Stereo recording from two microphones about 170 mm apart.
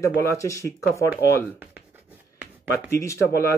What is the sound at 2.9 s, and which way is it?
Speech, 20° left (ahead or behind).